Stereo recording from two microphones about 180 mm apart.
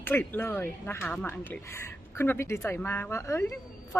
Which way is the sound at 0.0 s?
10° left (ahead or behind).